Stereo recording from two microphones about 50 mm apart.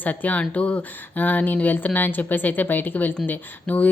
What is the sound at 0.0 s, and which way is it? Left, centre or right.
Speech, left.